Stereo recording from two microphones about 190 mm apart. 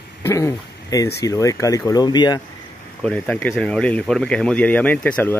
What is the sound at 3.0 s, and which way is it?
Speech, 5° left (ahead or behind).